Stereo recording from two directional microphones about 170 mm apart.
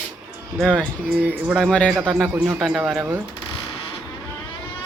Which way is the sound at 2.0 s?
10° right (ahead or behind).